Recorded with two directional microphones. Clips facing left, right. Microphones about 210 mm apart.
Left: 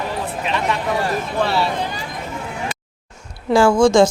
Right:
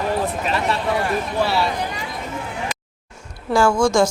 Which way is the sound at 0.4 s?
40° right (ahead or behind).